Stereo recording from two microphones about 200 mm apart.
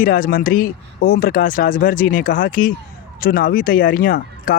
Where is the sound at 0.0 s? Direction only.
45° left (ahead or behind).